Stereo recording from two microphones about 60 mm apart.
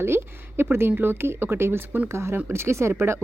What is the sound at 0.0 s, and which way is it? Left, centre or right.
A woman's voice, right.